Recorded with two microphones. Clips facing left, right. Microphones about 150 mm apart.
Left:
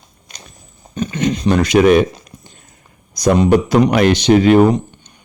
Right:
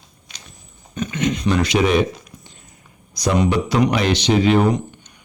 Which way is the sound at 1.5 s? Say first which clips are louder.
Left 7 dB; 50° left (ahead or behind).